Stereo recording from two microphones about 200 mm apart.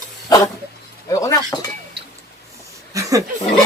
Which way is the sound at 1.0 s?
15° left (ahead or behind).